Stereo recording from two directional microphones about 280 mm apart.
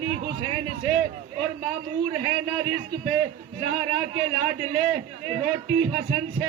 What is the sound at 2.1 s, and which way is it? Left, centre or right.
A man's voice, centre.